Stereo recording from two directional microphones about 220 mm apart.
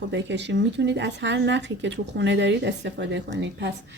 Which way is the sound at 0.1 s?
55° right (ahead or behind).